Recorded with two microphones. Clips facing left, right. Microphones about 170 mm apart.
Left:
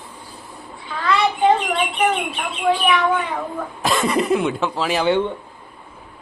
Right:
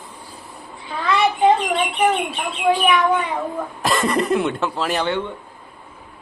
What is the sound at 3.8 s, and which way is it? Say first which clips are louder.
A man's voice: left 1 dB; centre (ahead or behind).